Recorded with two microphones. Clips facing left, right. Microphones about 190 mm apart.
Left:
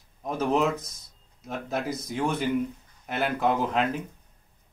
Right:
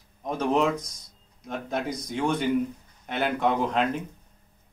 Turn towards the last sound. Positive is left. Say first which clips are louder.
# even
turn(degrees=0)  # may be behind; listen again after turning